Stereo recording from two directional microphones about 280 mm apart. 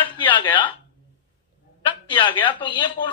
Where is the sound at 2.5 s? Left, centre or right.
Centre.